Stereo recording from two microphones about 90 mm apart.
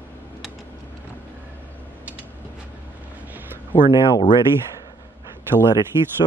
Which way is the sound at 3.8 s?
65° left (ahead or behind).